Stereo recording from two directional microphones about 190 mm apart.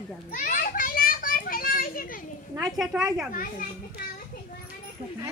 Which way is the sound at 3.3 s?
45° left (ahead or behind).